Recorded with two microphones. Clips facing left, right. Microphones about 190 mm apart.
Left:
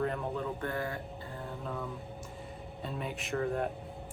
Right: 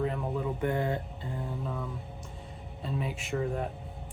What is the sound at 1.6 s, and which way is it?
Speech, centre (ahead or behind).